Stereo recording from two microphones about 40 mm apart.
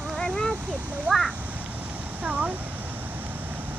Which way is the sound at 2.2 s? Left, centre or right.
Right.